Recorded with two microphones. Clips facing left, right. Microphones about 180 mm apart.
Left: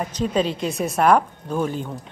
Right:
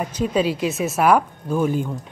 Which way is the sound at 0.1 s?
10° right (ahead or behind).